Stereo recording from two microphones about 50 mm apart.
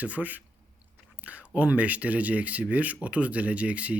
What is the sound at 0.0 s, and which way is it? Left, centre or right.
Speech, right.